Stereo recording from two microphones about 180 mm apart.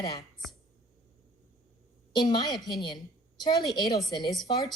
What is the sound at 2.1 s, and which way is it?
Speech, 25° left (ahead or behind).